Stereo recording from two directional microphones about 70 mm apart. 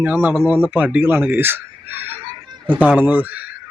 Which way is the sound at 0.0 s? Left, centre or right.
Right.